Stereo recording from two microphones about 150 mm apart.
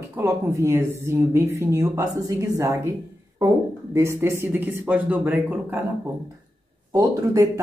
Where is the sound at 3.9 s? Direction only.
20° right (ahead or behind).